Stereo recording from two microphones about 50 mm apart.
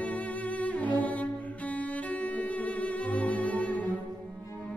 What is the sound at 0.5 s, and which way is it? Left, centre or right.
Cello, left.